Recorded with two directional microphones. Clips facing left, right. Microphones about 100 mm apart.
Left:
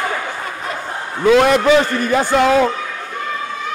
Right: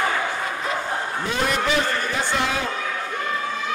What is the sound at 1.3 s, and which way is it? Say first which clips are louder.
Speech: left 13 dB; 90° left.